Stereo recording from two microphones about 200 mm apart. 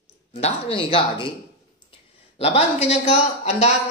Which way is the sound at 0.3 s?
30° left (ahead or behind).